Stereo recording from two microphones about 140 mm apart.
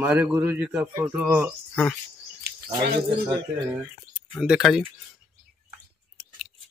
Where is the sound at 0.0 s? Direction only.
15° right (ahead or behind).